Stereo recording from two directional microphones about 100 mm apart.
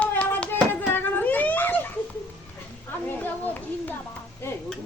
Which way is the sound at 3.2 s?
20° left (ahead or behind).